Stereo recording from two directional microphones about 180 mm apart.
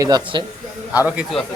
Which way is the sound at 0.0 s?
25° right (ahead or behind).